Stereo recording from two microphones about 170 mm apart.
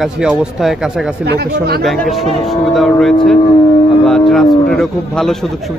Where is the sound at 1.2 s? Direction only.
75° right (ahead or behind).